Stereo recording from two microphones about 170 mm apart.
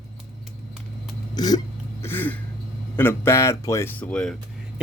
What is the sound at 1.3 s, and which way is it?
Hiccup, 25° left (ahead or behind).